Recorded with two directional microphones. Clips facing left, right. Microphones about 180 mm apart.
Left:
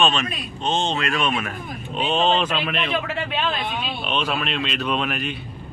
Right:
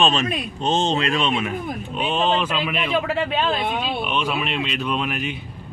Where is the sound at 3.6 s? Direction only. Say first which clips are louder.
Right 4 dB; 50° right (ahead or behind).